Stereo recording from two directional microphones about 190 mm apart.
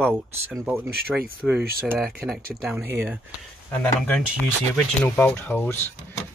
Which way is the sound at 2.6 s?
10° right (ahead or behind).